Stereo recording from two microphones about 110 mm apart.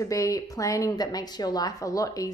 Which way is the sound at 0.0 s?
30° left (ahead or behind).